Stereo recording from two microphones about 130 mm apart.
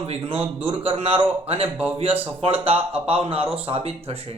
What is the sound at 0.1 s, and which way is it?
Speech, 45° right (ahead or behind).